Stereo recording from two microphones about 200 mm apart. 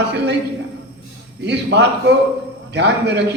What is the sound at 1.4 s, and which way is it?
A man's voice, 60° right (ahead or behind).